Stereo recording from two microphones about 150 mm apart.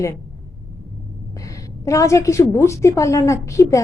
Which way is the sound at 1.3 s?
20° left (ahead or behind).